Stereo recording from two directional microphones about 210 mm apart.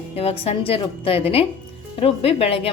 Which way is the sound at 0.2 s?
30° left (ahead or behind).